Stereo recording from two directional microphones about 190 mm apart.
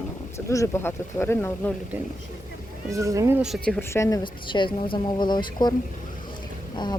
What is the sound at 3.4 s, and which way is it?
Speech, centre (ahead or behind).